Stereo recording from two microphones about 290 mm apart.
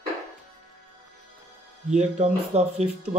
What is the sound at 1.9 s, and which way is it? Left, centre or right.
Speech, right.